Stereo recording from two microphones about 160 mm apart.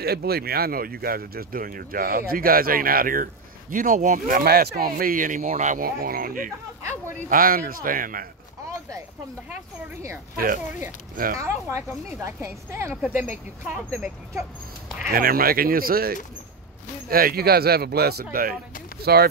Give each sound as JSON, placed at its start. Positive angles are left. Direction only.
{"t": 0.0, "sound": "speech", "side_deg": -75}
{"t": 6.8, "sound": "a sound", "side_deg": -15}
{"t": 7.2, "sound": "speech", "side_deg": -65}
{"t": 10.3, "sound": "speech", "side_deg": -65}
{"t": 11.3, "sound": "speech", "side_deg": -20}
{"t": 15.0, "sound": "speech", "side_deg": -65}
{"t": 19.1, "sound": "speech", "side_deg": -80}